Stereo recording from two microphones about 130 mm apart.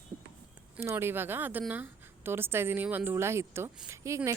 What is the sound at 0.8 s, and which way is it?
A woman's voice, 15° right (ahead or behind).